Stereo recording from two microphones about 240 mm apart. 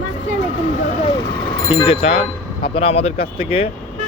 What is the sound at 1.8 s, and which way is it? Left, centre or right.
Speech, left.